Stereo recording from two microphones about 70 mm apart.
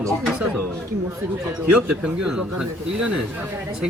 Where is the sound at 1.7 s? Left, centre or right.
Centre.